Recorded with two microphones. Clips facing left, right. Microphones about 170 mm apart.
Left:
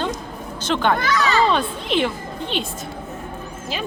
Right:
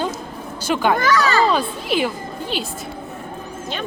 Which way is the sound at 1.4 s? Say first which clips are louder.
Right 1 dB; 5° right (ahead or behind).